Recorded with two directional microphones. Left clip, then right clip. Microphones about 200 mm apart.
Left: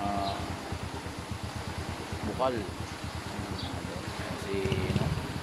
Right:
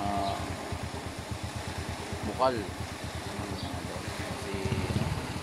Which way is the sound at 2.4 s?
15° right (ahead or behind).